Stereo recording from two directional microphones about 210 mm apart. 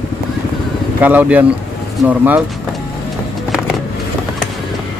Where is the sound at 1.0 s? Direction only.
5° right (ahead or behind).